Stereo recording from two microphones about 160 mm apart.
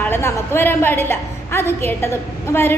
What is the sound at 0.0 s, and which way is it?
A woman's voice, 15° left (ahead or behind).